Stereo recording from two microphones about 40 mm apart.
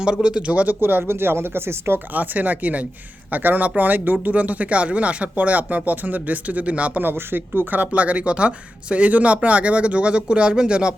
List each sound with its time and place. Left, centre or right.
0.0 s speech: right
0.4 s speech: right
0.8 s speech: right
2.1 s speech: right
4.3 s speech: right
7.0 s speech: right